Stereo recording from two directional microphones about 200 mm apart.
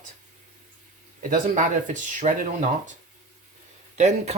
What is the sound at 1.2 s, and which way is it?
Speech, 40° right (ahead or behind).